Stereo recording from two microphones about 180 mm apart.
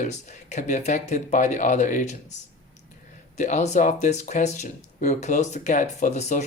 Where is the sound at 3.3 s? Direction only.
40° left (ahead or behind).